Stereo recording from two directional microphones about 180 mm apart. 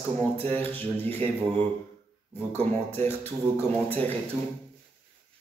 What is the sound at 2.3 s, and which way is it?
A man's voice, 10° left (ahead or behind).